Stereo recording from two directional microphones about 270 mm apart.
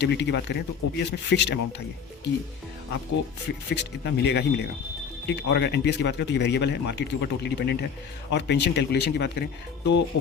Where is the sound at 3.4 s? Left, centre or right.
Left.